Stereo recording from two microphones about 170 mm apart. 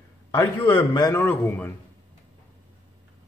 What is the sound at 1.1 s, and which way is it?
Speech, 10° left (ahead or behind).